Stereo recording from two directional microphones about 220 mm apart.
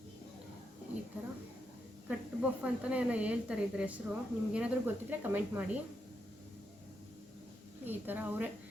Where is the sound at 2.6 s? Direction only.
5° right (ahead or behind).